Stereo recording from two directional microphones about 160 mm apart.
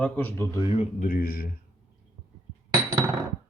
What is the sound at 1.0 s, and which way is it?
Speech, 65° left (ahead or behind).